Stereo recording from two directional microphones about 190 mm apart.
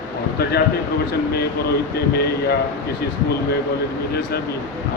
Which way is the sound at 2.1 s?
55° left (ahead or behind).